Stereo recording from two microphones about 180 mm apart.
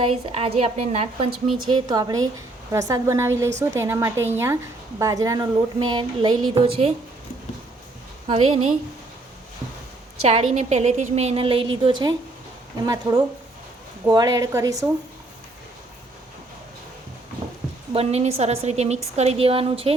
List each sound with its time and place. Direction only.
0.0 s a woman's voice: 35° right (ahead or behind)
1.6 s a woman's voice: 25° right (ahead or behind)
8.3 s a woman's voice: 30° right (ahead or behind)
10.2 s a woman's voice: 35° right (ahead or behind); by 14.8 s 20° right (ahead or behind)
17.9 s a woman's voice: 35° right (ahead or behind)